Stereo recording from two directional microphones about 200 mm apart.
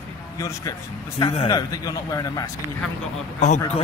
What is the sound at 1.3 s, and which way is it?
A man's voice, 20° left (ahead or behind).